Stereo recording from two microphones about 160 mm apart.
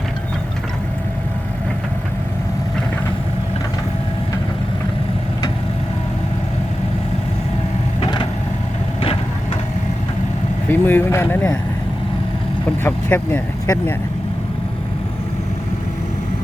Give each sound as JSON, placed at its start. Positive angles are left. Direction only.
{"t": 8.0, "sound": "vehicle", "side_deg": 30}
{"t": 10.7, "sound": "speech", "side_deg": 15}
{"t": 12.8, "sound": "speech", "side_deg": 10}